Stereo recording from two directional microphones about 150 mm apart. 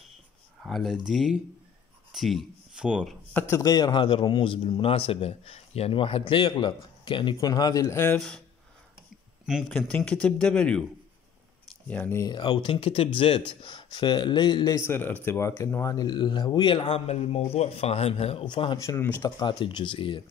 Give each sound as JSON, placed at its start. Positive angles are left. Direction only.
{"t": 0.6, "sound": "speech", "side_deg": 0}
{"t": 3.3, "sound": "a man's voice", "side_deg": 20}
{"t": 9.7, "sound": "speech", "side_deg": 10}
{"t": 11.9, "sound": "speech", "side_deg": 15}
{"t": 12.3, "sound": "a man's voice", "side_deg": 30}
{"t": 14.8, "sound": "a man's voice", "side_deg": 15}
{"t": 18.8, "sound": "speech", "side_deg": 20}
{"t": 19.4, "sound": "a man's voice", "side_deg": 30}